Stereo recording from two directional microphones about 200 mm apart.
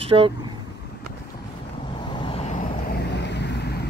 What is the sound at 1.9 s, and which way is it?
Vehicle, 25° left (ahead or behind).